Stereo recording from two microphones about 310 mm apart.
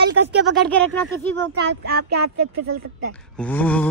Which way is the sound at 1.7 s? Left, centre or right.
Right.